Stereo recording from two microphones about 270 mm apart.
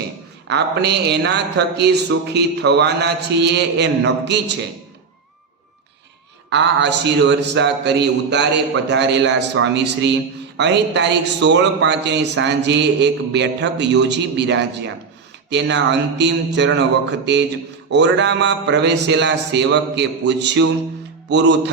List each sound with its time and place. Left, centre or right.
0.4 s speech: right
6.5 s speech: right
21.2 s music: right